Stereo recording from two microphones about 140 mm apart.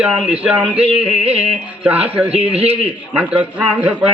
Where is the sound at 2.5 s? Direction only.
45° right (ahead or behind).